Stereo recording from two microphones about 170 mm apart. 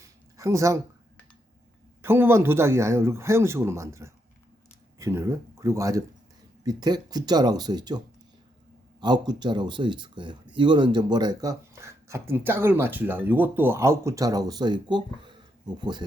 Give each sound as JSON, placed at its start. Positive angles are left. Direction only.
{"t": 0.3, "sound": "speech", "side_deg": -20}
{"t": 2.0, "sound": "speech", "side_deg": -15}